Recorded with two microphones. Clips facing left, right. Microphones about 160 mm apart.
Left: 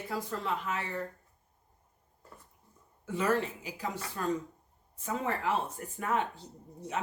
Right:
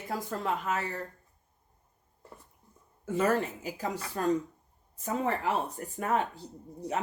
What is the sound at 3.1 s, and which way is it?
A woman's voice, 45° right (ahead or behind).